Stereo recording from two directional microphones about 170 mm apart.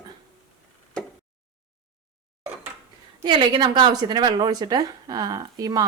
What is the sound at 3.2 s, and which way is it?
A woman's voice, 25° right (ahead or behind).